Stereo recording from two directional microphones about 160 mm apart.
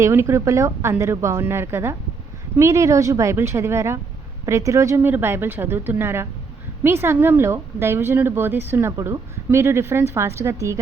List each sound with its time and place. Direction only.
0.0 s speech: 15° right (ahead or behind)